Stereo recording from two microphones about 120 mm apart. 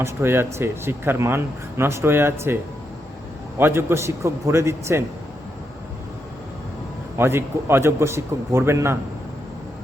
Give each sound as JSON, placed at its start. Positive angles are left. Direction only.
{"t": 0.0, "sound": "speech", "side_deg": -20}
{"t": 3.6, "sound": "speech", "side_deg": -20}
{"t": 7.2, "sound": "speech", "side_deg": -20}